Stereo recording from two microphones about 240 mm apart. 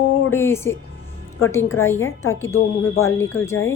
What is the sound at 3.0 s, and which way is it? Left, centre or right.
Speech, left.